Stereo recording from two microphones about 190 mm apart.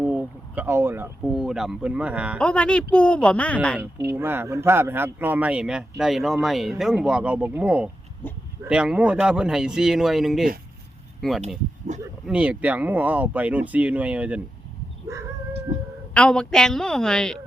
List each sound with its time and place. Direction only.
0.0 s a sound: 10° right (ahead or behind)
1.2 s speech: centre (ahead or behind)
2.4 s speech: 5° left (ahead or behind)
4.1 s speech: 10° right (ahead or behind)
11.9 s speech: 40° right (ahead or behind)
12.2 s speech: 5° right (ahead or behind)
16.1 s speech: 5° left (ahead or behind)